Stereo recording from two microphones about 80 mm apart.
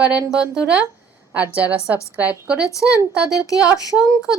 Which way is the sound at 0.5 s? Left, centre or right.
Centre.